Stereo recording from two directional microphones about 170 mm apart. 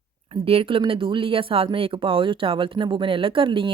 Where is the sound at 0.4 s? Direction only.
35° right (ahead or behind).